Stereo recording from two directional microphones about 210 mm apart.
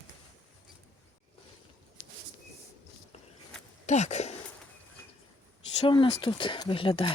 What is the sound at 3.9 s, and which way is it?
Speech, 35° left (ahead or behind).